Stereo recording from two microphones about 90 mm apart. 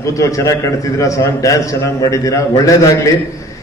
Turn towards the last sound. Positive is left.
turn(degrees=40)  # may be behind; listen again after turning